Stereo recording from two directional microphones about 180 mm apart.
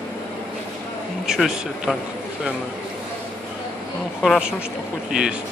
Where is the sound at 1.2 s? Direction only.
Centre (ahead or behind).